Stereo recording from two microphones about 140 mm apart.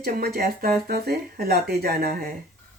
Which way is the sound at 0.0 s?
90° right.